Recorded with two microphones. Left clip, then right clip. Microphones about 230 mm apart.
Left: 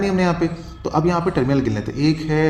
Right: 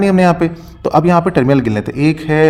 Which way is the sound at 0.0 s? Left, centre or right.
Right.